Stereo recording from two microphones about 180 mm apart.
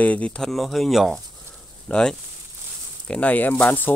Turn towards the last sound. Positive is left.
turn(degrees=10)  # may be behind; listen again after turning